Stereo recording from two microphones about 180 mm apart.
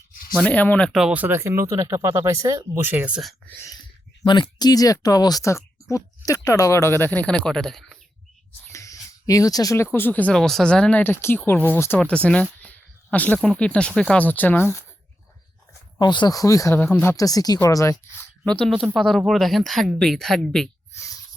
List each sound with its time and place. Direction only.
0.1 s a sound: 50° left (ahead or behind)
0.3 s speech: 10° left (ahead or behind)
4.2 s speech: 25° left (ahead or behind); by 7.9 s 5° left (ahead or behind)
8.7 s speech: 15° left (ahead or behind)
16.0 s speech: 25° left (ahead or behind)
18.4 s speech: 5° left (ahead or behind)
20.9 s speech: 15° left (ahead or behind)